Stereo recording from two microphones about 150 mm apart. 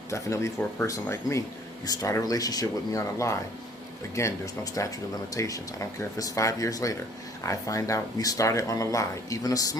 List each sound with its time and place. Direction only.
0.1 s speech: 20° left (ahead or behind)